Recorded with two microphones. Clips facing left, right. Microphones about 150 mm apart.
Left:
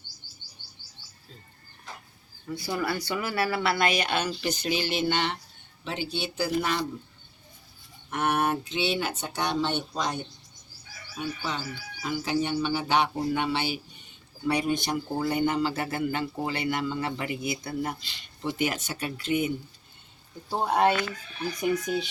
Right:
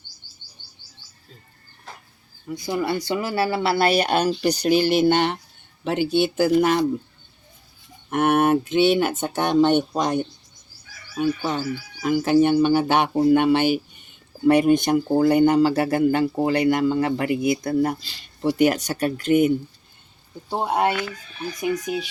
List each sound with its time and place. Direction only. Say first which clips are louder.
2.6 s speech: right 6 dB; 20° right (ahead or behind); by 6.8 s 50° right (ahead or behind)
8.1 s speech: right 8 dB; 50° right (ahead or behind)
11.2 s insect: right 10 dB; 55° right (ahead or behind)
12.0 s speech: right 11 dB; 55° right (ahead or behind)
20.5 s speech: right 2 dB; 20° right (ahead or behind)